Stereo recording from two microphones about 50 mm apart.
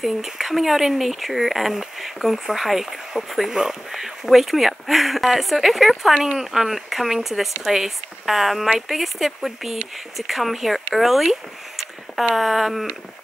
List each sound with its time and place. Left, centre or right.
0.0 s speech: centre
12.4 s speech: centre